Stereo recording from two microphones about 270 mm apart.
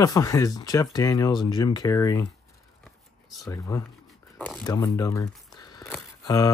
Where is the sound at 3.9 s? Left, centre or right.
Centre.